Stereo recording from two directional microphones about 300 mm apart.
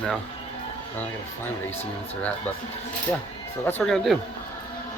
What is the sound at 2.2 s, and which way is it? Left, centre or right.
Speech, centre.